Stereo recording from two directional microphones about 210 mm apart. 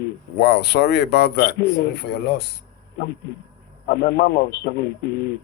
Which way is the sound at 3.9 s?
50° left (ahead or behind).